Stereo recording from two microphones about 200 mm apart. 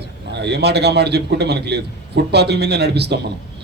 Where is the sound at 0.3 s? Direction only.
55° right (ahead or behind).